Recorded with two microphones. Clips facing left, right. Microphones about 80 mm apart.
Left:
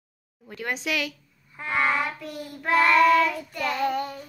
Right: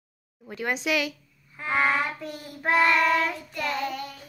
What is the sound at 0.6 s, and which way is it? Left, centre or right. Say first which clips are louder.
Child singing: right 2 dB; centre.